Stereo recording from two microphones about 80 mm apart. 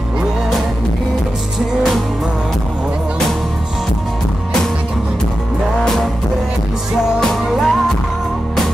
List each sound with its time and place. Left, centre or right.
7.2 s music: centre